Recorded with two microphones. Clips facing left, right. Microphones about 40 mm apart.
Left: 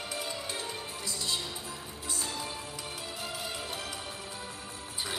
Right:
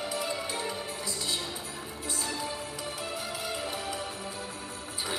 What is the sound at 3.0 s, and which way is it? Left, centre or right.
Music, right.